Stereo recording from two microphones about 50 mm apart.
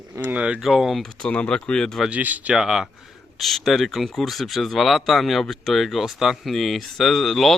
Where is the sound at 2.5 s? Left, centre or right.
Centre.